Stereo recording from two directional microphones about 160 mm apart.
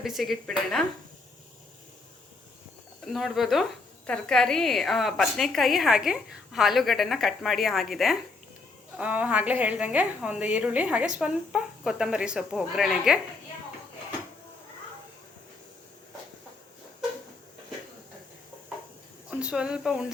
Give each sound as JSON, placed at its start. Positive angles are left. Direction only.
{"t": 0.0, "sound": "speech", "side_deg": 0}
{"t": 3.1, "sound": "a woman's voice", "side_deg": 0}
{"t": 19.3, "sound": "speech", "side_deg": -5}